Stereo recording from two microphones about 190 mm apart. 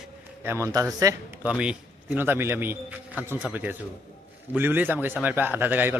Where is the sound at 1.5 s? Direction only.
5° right (ahead or behind).